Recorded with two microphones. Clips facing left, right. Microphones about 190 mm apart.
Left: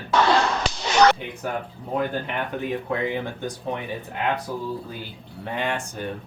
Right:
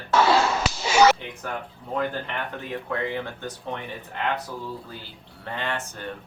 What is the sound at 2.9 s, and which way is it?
Speech, 15° left (ahead or behind).